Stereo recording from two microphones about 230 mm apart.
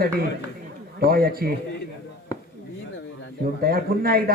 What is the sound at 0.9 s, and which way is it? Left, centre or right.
Speech, right.